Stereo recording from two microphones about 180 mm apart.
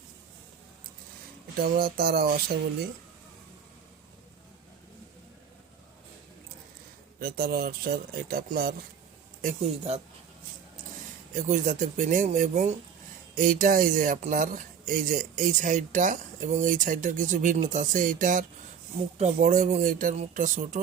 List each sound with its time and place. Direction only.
1.5 s speech: 55° right (ahead or behind)
7.2 s speech: 55° right (ahead or behind)
9.4 s speech: 40° right (ahead or behind)
11.3 s speech: 45° right (ahead or behind)